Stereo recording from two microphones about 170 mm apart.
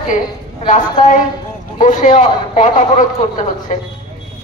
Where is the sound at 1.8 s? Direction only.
45° left (ahead or behind).